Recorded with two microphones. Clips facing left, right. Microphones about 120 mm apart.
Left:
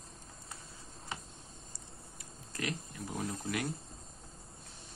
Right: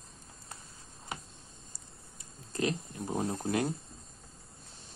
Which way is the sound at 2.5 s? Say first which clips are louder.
Right 7 dB; 30° right (ahead or behind).